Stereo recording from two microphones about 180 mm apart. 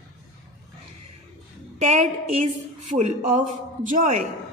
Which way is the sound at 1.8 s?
40° right (ahead or behind).